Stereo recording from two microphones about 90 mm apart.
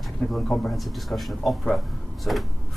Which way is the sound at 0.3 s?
5° left (ahead or behind).